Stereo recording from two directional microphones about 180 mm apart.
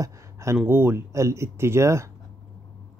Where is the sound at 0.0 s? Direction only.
15° right (ahead or behind).